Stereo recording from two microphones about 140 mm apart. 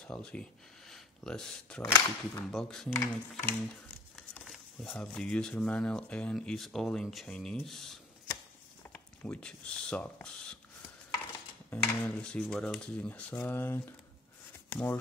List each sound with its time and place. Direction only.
0.0 s speech: 5° left (ahead or behind)
1.8 s speech: 20° left (ahead or behind)
2.5 s speech: 5° left (ahead or behind)
2.9 s speech: 20° left (ahead or behind)
4.5 s speech: 5° left (ahead or behind)
11.7 s speech: 10° left (ahead or behind)